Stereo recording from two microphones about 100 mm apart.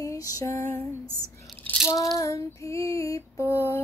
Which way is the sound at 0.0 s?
35° left (ahead or behind).